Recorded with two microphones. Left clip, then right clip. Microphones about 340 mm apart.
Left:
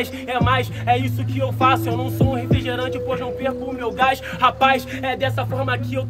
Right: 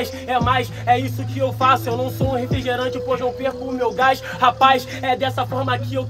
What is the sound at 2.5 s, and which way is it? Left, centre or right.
Speech, centre.